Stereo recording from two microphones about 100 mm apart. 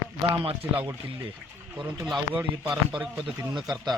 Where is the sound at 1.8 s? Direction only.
Centre (ahead or behind).